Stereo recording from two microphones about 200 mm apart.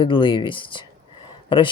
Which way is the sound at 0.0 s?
25° left (ahead or behind).